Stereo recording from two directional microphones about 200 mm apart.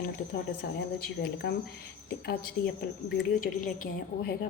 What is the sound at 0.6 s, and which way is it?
Speech, 50° left (ahead or behind).